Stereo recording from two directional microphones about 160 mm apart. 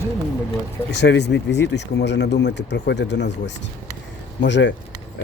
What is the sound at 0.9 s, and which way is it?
Speech, 90° left.